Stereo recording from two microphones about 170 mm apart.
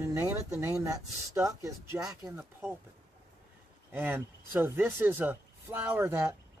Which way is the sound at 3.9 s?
10° right (ahead or behind).